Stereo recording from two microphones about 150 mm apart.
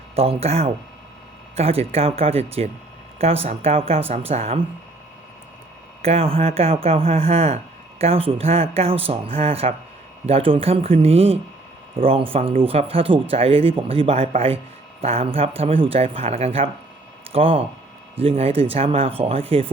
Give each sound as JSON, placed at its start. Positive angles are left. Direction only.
{"t": 0.2, "sound": "speech", "side_deg": -40}
{"t": 6.0, "sound": "speech", "side_deg": -40}